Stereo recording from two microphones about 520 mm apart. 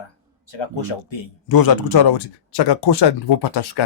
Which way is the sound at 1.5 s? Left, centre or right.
Left.